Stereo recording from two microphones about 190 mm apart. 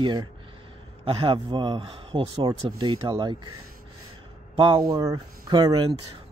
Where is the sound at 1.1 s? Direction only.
25° right (ahead or behind).